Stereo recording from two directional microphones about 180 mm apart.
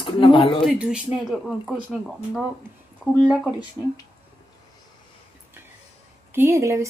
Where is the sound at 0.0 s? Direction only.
30° left (ahead or behind).